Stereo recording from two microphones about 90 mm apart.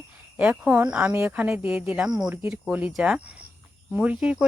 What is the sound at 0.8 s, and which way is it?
Speech, 15° right (ahead or behind).